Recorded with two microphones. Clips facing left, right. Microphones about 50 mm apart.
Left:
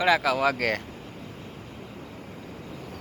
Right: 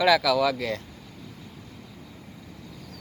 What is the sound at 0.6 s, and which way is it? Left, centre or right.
Speech, left.